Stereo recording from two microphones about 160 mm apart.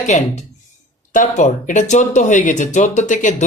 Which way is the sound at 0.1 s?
45° left (ahead or behind).